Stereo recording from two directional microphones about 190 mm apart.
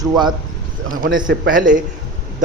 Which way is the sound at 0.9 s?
45° right (ahead or behind).